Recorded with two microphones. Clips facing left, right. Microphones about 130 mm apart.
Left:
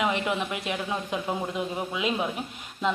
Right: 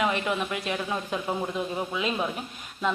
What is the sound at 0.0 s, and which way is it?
Speech, 20° left (ahead or behind).